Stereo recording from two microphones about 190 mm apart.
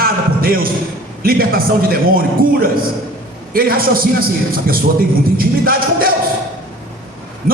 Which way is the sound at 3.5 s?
50° right (ahead or behind).